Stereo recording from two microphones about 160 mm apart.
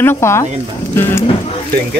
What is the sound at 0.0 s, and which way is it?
Speech, 15° left (ahead or behind).